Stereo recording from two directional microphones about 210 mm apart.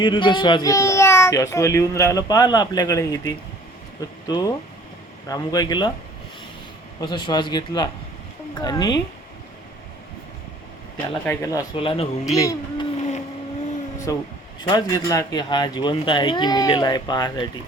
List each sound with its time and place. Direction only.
0.0 s speech: 20° left (ahead or behind)
7.0 s speech: 20° left (ahead or behind)
11.4 s speech: 20° left (ahead or behind)
12.2 s speech: 15° left (ahead or behind)
13.0 s boat: 35° left (ahead or behind)
14.1 s speech: 15° left (ahead or behind)